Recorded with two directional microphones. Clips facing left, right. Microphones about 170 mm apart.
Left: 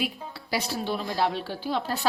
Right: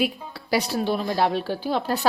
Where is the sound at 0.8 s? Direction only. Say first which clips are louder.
Right 4 dB; 50° right (ahead or behind).